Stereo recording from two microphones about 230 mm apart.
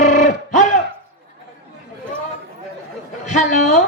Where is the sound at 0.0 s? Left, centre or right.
Left.